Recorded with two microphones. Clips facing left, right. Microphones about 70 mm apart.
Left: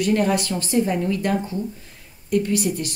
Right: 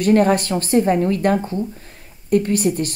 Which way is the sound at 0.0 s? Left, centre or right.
Right.